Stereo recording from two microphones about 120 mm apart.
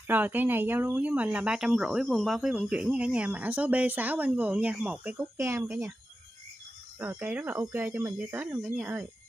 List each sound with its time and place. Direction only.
0.0 s speech: 15° right (ahead or behind)
5.4 s speech: 25° right (ahead or behind)
7.0 s speech: 15° right (ahead or behind)